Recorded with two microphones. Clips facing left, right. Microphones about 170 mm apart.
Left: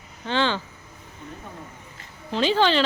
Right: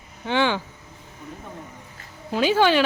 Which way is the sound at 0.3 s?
15° right (ahead or behind).